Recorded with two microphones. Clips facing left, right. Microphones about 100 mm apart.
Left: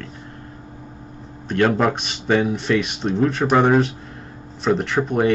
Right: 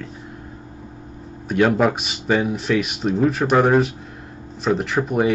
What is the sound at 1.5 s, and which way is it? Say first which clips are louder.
Speech: right 1 dB; 5° right (ahead or behind).